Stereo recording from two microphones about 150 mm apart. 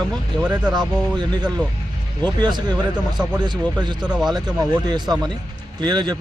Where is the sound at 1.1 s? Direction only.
30° right (ahead or behind).